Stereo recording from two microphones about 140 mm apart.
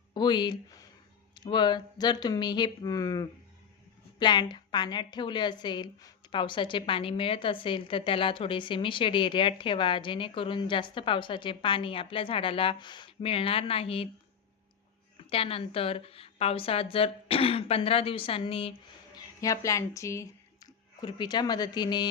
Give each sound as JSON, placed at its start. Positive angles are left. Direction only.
{"t": 0.1, "sound": "a woman's voice", "side_deg": 30}
{"t": 15.3, "sound": "a woman's voice", "side_deg": 45}
{"t": 19.1, "sound": "speech", "side_deg": 25}